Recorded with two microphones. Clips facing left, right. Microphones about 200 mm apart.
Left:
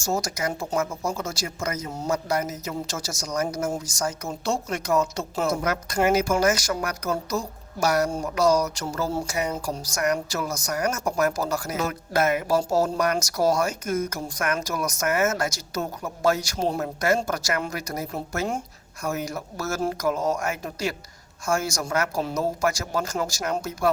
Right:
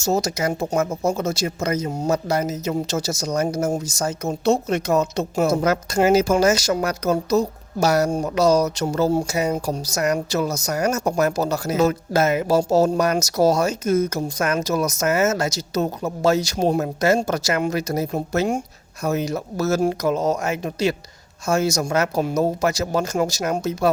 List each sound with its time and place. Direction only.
0.0 s speech: 25° right (ahead or behind)